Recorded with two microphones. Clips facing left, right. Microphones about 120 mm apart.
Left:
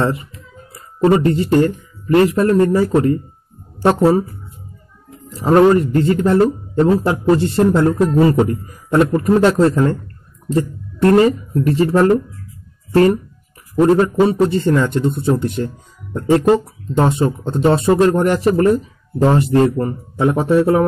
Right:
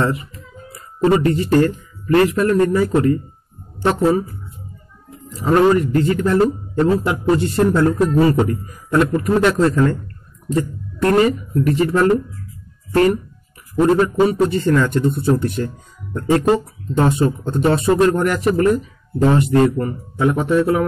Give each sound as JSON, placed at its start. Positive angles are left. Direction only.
{"t": 1.1, "sound": "speech", "side_deg": 30}
{"t": 5.4, "sound": "speech", "side_deg": 30}